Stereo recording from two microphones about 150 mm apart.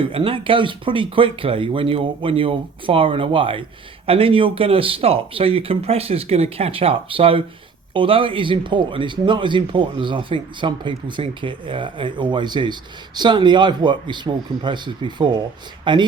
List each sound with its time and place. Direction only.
0.0 s speech: 35° right (ahead or behind)